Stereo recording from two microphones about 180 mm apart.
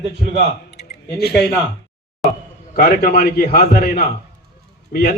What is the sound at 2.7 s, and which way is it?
A man's voice, 55° left (ahead or behind).